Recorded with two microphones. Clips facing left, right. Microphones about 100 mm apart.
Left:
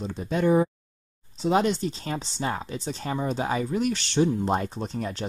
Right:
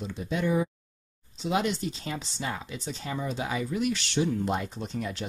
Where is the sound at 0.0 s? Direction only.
40° left (ahead or behind).